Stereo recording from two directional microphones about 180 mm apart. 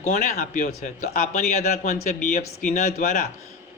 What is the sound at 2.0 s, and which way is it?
Speech, 45° left (ahead or behind).